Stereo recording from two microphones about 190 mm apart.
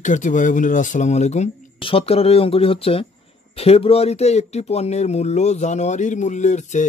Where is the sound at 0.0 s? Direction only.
40° left (ahead or behind).